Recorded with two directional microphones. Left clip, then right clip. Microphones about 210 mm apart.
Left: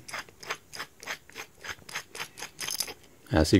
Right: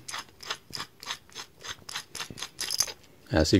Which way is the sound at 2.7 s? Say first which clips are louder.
Right 5 dB; 10° right (ahead or behind).